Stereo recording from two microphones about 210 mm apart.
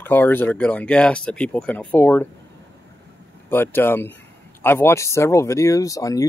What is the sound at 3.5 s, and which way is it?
Speech, 10° left (ahead or behind).